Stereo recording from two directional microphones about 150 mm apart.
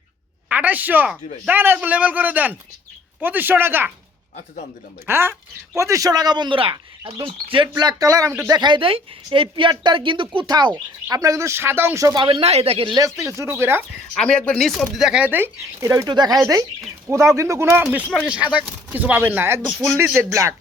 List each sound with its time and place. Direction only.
0.4 s speech: 10° right (ahead or behind)
5.0 s a woman's voice: 15° right (ahead or behind); by 7.7 s 35° right (ahead or behind)
7.8 s a woman's voice: 25° right (ahead or behind)
12.2 s speech: 35° right (ahead or behind)
13.1 s speech: 20° right (ahead or behind)
14.2 s a woman's voice: 5° left (ahead or behind); by 17.8 s 20° right (ahead or behind)
18.3 s a woman's voice: 10° right (ahead or behind)